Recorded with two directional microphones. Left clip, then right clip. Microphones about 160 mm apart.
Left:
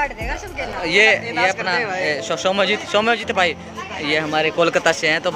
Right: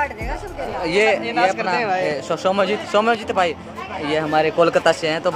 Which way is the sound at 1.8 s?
45° right (ahead or behind).